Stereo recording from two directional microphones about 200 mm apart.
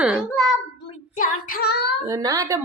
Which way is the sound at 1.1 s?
45° left (ahead or behind).